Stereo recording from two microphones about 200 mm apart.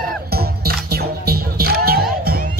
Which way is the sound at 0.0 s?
50° right (ahead or behind).